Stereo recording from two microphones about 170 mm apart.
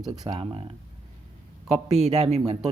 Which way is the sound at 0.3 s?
35° right (ahead or behind).